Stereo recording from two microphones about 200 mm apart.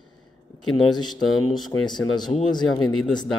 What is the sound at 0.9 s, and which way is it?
Speech, 20° left (ahead or behind).